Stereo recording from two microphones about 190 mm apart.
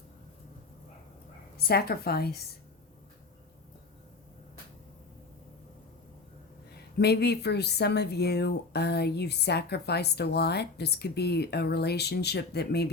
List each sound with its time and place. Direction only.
1.5 s speech: 55° left (ahead or behind)
6.7 s speech: 60° left (ahead or behind)